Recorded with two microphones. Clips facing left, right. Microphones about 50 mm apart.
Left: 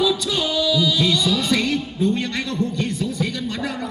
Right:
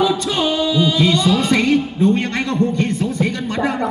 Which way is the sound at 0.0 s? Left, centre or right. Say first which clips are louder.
Right 3 dB; right.